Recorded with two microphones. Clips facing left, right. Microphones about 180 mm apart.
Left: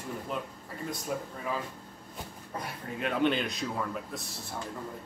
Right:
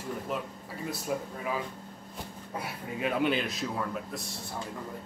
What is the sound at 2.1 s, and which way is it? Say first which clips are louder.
Speech: right 1 dB; 5° right (ahead or behind).